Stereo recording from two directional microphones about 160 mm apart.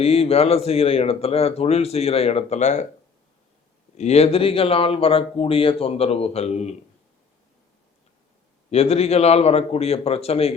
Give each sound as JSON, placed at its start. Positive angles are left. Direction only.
{"t": 0.0, "sound": "speech", "side_deg": 40}
{"t": 3.9, "sound": "speech", "side_deg": 40}
{"t": 8.7, "sound": "speech", "side_deg": 40}